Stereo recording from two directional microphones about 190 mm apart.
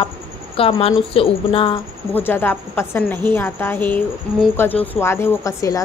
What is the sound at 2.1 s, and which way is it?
A woman's voice, 10° left (ahead or behind).